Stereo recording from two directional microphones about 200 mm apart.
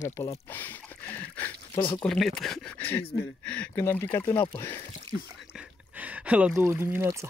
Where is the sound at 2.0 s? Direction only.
Centre (ahead or behind).